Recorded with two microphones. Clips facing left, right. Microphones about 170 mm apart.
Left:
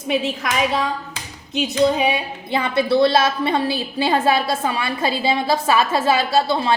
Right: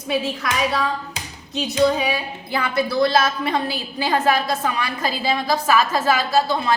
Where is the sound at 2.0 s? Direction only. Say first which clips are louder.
Left 3 dB; 25° left (ahead or behind).